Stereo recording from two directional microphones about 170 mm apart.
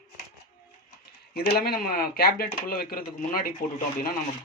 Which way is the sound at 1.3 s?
60° left (ahead or behind).